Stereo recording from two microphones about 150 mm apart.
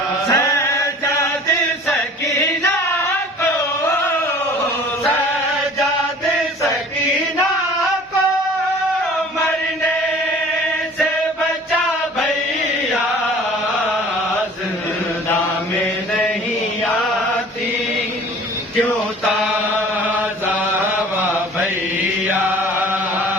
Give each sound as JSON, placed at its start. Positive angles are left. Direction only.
{"t": 0.3, "sound": "chant", "side_deg": 20}